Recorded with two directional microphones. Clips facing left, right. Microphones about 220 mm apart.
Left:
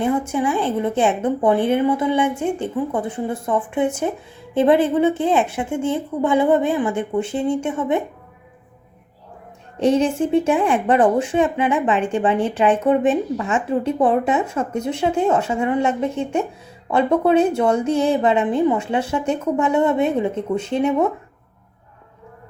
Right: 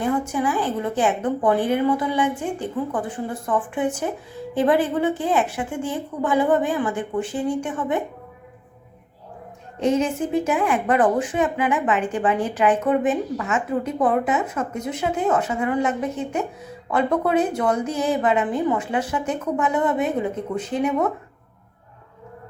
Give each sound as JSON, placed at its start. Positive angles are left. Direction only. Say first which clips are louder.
{"t": 0.0, "sound": "a woman's voice", "louder": "left 3 dB", "side_deg": 25}
{"t": 9.8, "sound": "a woman's voice", "louder": "left 4 dB", "side_deg": 30}